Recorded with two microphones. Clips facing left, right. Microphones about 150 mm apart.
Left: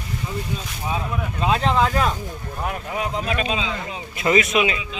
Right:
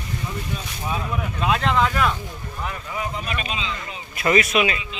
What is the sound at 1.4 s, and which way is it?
Speech, 30° left (ahead or behind).